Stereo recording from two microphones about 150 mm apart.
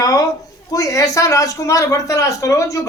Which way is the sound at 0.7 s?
20° left (ahead or behind).